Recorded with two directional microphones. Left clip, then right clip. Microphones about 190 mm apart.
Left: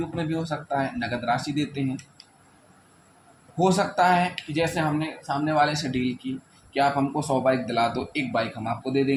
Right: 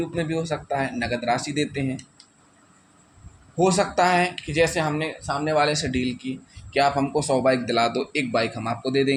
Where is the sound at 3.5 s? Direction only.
25° right (ahead or behind).